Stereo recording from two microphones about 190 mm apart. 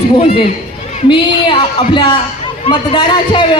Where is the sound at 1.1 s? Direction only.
25° left (ahead or behind).